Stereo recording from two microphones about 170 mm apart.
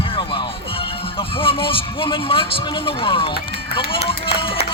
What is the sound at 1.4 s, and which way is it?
Speech, 30° left (ahead or behind).